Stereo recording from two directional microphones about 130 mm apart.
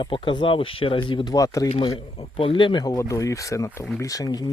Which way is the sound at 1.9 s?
40° left (ahead or behind).